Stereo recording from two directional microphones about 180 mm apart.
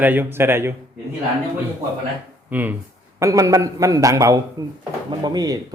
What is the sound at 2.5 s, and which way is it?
A man's voice, 10° right (ahead or behind).